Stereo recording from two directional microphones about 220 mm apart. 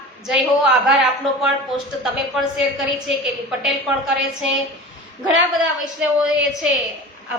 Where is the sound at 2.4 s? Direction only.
Centre (ahead or behind).